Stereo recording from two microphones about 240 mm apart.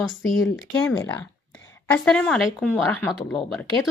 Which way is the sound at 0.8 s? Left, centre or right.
Centre.